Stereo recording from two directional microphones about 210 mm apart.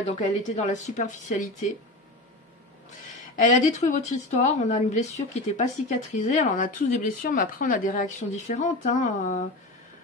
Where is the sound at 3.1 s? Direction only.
35° left (ahead or behind).